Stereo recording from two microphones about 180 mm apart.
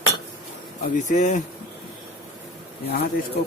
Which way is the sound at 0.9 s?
45° left (ahead or behind).